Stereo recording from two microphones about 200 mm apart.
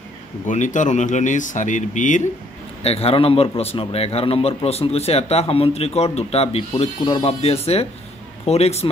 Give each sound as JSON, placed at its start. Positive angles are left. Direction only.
{"t": 0.5, "sound": "a man's voice", "side_deg": 40}